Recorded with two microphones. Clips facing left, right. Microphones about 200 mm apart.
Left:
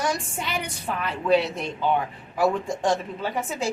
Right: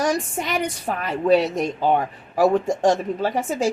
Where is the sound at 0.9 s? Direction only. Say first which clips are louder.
Right 3 dB; 40° right (ahead or behind).